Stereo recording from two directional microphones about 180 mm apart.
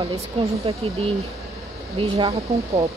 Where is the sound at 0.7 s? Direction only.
30° right (ahead or behind).